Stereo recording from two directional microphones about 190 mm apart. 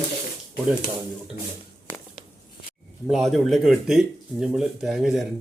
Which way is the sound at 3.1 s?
Centre (ahead or behind).